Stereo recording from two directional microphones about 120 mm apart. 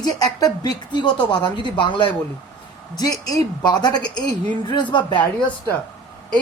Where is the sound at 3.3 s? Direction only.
35° left (ahead or behind).